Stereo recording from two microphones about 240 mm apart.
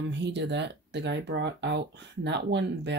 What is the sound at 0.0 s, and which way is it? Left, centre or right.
Speech, right.